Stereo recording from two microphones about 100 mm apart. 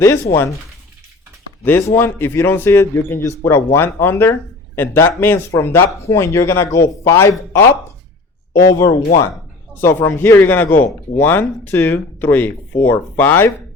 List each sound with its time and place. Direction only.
0.0 s speech: 25° left (ahead or behind)
1.8 s speech: 25° left (ahead or behind)
9.8 s speech: 20° left (ahead or behind)